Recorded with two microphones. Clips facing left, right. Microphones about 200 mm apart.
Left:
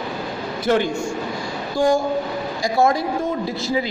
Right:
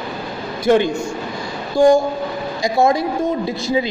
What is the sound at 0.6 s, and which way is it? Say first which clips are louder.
Speech: right 5 dB; 20° right (ahead or behind).